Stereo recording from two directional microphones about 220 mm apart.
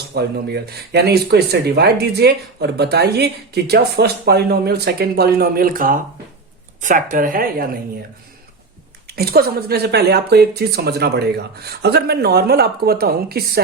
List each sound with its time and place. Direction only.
0.1 s speech: 45° right (ahead or behind)
9.0 s speech: 45° right (ahead or behind)